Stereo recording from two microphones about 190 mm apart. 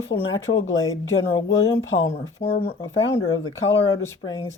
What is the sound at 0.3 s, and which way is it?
Speech, 90° left.